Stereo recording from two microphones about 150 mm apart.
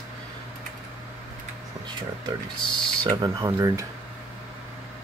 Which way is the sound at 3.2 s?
20° right (ahead or behind).